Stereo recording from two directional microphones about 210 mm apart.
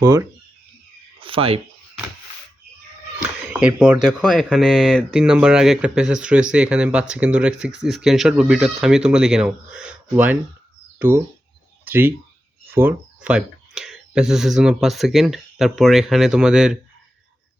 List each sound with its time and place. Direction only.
0.0 s speech: 10° right (ahead or behind)
1.2 s speech: 25° right (ahead or behind)
3.6 s speech: 5° right (ahead or behind)
11.9 s speech: 10° right (ahead or behind)